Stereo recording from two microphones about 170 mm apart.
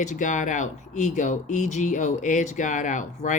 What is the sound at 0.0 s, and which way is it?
Speech, 45° left (ahead or behind).